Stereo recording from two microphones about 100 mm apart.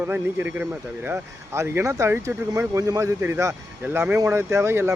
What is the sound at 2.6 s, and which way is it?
Speech, 35° right (ahead or behind).